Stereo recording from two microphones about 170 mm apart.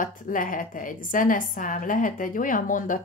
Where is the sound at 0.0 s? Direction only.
50° left (ahead or behind).